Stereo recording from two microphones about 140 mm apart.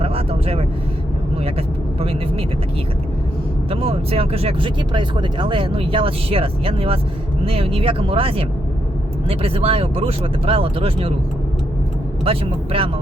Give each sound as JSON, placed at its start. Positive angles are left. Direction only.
{"t": 0.0, "sound": "vehicle", "side_deg": -45}
{"t": 2.0, "sound": "speech", "side_deg": -45}
{"t": 3.7, "sound": "speech", "side_deg": -45}
{"t": 12.2, "sound": "speech", "side_deg": -40}